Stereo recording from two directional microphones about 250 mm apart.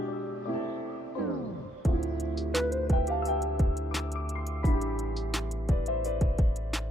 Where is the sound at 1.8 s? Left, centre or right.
Centre.